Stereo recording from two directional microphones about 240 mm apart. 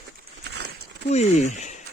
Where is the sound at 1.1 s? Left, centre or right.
Left.